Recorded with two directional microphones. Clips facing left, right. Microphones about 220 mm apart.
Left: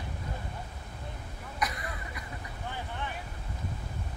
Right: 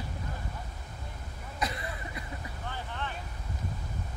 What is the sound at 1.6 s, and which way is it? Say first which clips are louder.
Throat clearing: even; 25° right (ahead or behind).